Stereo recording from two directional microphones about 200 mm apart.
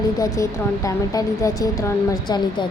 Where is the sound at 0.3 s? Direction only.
15° left (ahead or behind).